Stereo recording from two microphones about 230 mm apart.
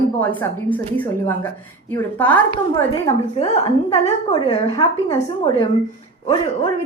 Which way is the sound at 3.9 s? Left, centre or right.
Left.